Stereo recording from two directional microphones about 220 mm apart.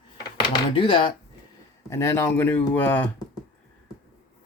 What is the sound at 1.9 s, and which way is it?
Speech, 10° left (ahead or behind).